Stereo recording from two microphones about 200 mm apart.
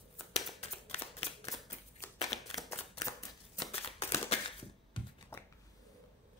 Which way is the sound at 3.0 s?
20° left (ahead or behind).